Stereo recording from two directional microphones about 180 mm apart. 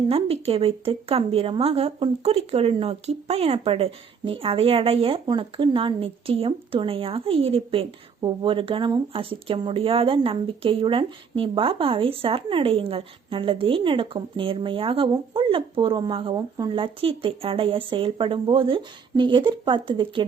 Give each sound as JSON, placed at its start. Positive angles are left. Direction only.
{"t": 0.1, "sound": "a woman's voice", "side_deg": -35}